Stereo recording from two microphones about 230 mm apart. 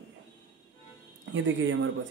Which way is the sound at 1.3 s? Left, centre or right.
Right.